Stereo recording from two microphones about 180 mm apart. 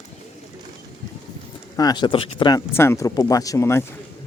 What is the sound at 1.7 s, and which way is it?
Speech, 25° left (ahead or behind).